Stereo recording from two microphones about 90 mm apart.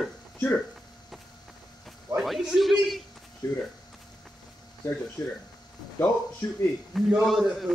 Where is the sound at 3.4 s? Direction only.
40° left (ahead or behind).